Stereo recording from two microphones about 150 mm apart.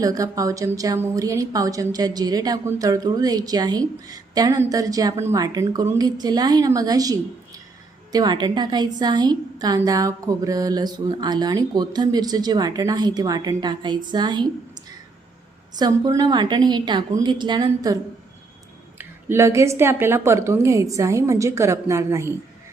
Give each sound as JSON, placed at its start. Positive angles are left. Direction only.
{"t": 0.0, "sound": "a woman's voice", "side_deg": -25}
{"t": 15.7, "sound": "a woman's voice", "side_deg": -25}
{"t": 18.9, "sound": "a woman's voice", "side_deg": -15}